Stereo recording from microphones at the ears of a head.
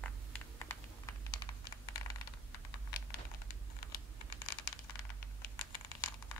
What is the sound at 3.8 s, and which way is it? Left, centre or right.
Computer keyboard, left.